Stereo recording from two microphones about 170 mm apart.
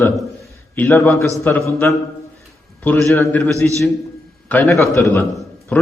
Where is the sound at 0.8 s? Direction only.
10° left (ahead or behind).